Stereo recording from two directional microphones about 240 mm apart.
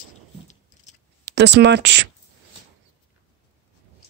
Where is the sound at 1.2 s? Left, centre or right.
Right.